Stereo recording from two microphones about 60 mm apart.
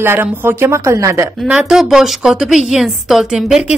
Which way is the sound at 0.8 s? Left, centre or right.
Right.